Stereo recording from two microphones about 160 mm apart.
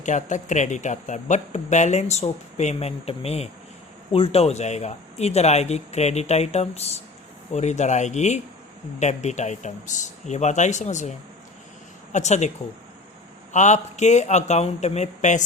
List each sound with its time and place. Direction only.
0.0 s speech: 50° left (ahead or behind)
12.1 s speech: 45° left (ahead or behind)
13.5 s speech: 50° left (ahead or behind)